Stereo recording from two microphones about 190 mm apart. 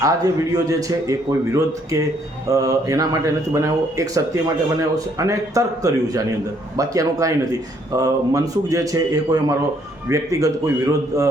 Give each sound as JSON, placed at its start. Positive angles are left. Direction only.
{"t": 0.0, "sound": "a man's voice", "side_deg": -20}